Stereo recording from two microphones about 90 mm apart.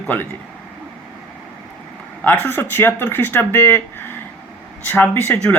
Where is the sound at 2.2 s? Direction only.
20° left (ahead or behind).